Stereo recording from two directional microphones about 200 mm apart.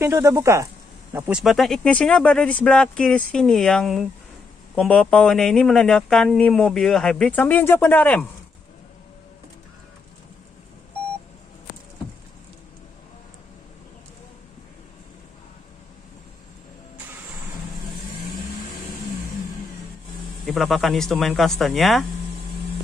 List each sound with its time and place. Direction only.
0.0 s speech: 15° right (ahead or behind)
1.4 s speech: centre (ahead or behind)
20.4 s speech: centre (ahead or behind)